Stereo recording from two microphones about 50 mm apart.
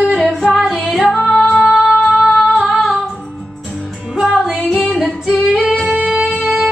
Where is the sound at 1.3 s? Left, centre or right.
Centre.